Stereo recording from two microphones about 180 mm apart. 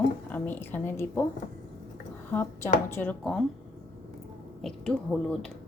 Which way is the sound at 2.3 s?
15° left (ahead or behind).